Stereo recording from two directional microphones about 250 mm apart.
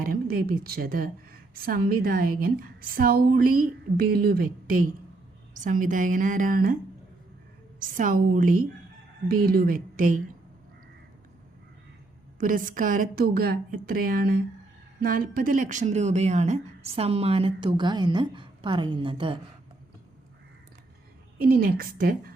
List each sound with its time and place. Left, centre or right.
0.0 s a woman's voice: right
7.9 s a woman's voice: right
12.4 s a woman's voice: right
21.3 s a woman's voice: right